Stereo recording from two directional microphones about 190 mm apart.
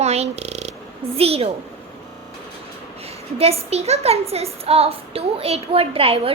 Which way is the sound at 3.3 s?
30° right (ahead or behind).